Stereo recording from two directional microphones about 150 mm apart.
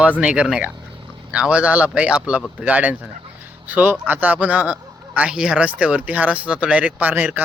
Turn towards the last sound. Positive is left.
turn(degrees=-10)  # may be behind; listen again after turning